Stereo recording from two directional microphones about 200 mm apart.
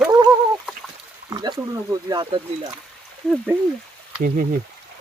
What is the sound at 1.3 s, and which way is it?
Speech, 20° right (ahead or behind).